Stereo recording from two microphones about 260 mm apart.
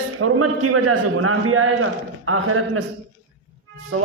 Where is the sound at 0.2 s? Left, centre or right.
Right.